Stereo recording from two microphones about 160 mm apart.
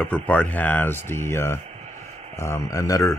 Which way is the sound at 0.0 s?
5° left (ahead or behind).